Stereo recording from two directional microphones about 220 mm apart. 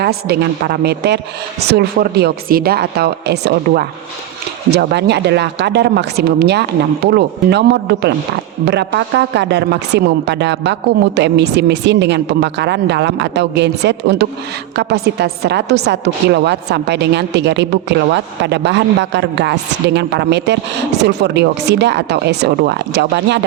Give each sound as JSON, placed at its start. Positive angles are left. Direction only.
{"t": 0.0, "sound": "a woman's voice", "side_deg": -45}